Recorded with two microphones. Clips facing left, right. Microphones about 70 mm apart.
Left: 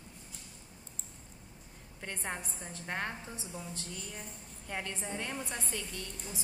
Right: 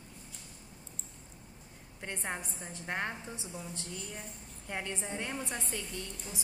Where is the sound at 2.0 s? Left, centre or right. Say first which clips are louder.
Right 1 dB; centre.